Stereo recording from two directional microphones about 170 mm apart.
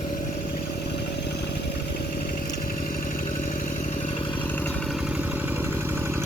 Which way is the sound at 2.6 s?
55° left (ahead or behind).